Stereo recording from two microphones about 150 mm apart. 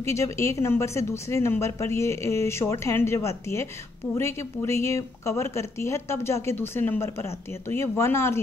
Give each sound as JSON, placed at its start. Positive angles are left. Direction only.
{"t": 0.0, "sound": "speech", "side_deg": 20}